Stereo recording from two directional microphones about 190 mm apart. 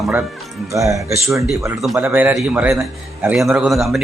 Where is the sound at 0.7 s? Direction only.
15° right (ahead or behind).